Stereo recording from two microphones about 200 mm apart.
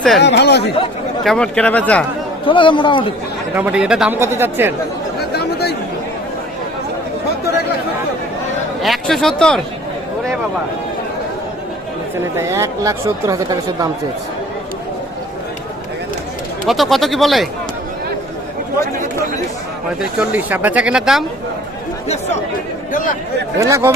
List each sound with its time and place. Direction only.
0.2 s speech: 60° left (ahead or behind)
1.2 s speech: 5° left (ahead or behind)
2.5 s a man's voice: 25° left (ahead or behind)
3.5 s speech: 5° right (ahead or behind)
5.3 s chatter: 55° left (ahead or behind)
8.8 s speech: centre (ahead or behind)
12.4 s speech: 15° right (ahead or behind)
16.6 s speech: centre (ahead or behind)
20.0 s speech: 5° right (ahead or behind)
22.9 s speech: 40° left (ahead or behind)
23.6 s speech: 15° right (ahead or behind)